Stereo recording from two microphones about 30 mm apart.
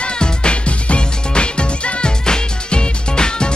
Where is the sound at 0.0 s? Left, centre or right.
Left.